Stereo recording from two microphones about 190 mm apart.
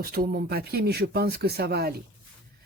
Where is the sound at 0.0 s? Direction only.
50° right (ahead or behind).